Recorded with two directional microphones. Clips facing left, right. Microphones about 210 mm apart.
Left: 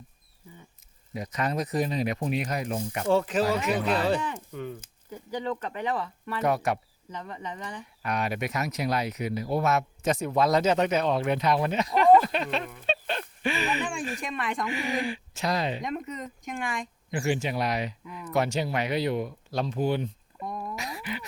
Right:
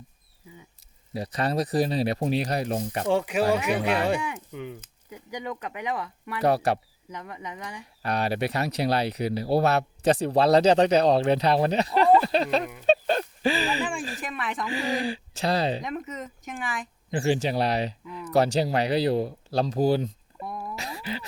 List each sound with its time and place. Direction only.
1.1 s speech: 35° right (ahead or behind)
3.1 s speech: 15° right (ahead or behind)
6.4 s speech: 35° right (ahead or behind)
7.1 s speech: 10° right (ahead or behind)
8.0 s speech: 35° right (ahead or behind)
12.8 s a sound: 40° right (ahead or behind)
14.2 s speech: centre (ahead or behind)
14.7 s speech: 35° right (ahead or behind)
15.8 s speech: centre (ahead or behind)
17.1 s speech: 30° right (ahead or behind)
20.4 s speech: 5° right (ahead or behind)
20.7 s a sound: 30° right (ahead or behind)